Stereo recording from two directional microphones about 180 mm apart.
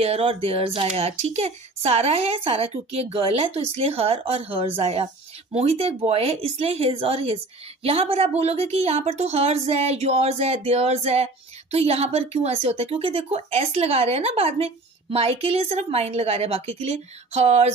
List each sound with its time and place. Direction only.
0.0 s speech: 35° right (ahead or behind)